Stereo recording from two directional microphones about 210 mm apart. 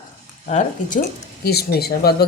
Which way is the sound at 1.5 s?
50° left (ahead or behind).